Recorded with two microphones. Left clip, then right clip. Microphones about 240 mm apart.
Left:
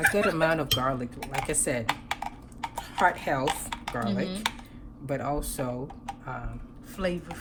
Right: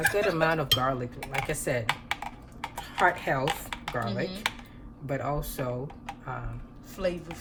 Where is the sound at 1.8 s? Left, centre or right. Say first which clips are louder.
Even; centre.